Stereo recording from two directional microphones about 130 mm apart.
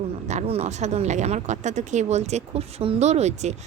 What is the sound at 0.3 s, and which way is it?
Speech, 55° right (ahead or behind).